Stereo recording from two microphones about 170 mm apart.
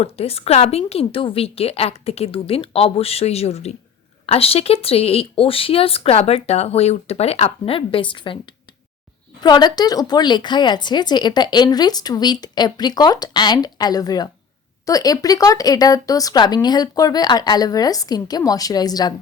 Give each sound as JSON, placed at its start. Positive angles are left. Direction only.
{"t": 0.0, "sound": "speech", "side_deg": 35}